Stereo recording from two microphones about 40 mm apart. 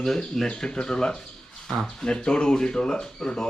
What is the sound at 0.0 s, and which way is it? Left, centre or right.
Speech, centre.